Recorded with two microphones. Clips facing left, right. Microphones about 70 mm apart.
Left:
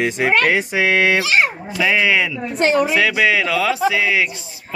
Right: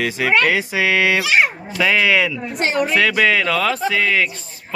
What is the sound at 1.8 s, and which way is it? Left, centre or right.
Speech, centre.